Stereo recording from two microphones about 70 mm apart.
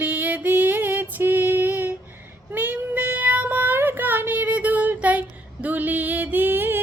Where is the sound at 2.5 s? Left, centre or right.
Right.